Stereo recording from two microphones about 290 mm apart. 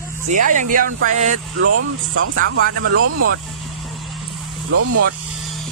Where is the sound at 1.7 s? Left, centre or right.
Right.